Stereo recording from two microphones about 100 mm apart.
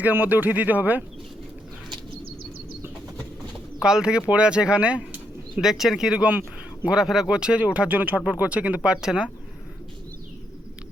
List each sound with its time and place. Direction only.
0.0 s speech: 20° right (ahead or behind)
3.8 s speech: 10° right (ahead or behind)